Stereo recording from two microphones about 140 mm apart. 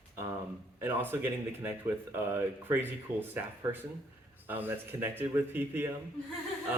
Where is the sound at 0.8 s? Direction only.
15° right (ahead or behind).